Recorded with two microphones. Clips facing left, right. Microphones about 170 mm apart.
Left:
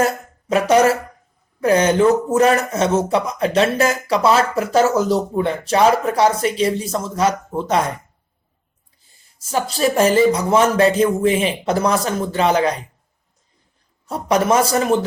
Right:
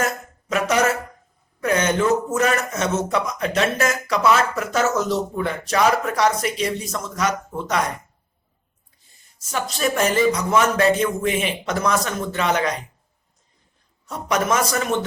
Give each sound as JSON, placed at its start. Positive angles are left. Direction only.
{"t": 0.5, "sound": "speech", "side_deg": 30}
{"t": 9.4, "sound": "speech", "side_deg": 30}
{"t": 14.1, "sound": "speech", "side_deg": 30}